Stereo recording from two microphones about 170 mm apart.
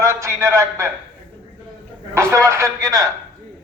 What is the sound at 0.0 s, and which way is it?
Speech, 15° right (ahead or behind).